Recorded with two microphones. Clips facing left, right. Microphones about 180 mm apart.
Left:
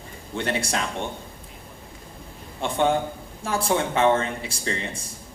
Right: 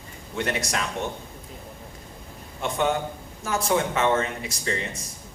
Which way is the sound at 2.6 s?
30° left (ahead or behind).